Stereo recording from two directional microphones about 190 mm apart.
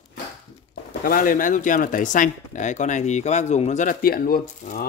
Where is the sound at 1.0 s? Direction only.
50° left (ahead or behind).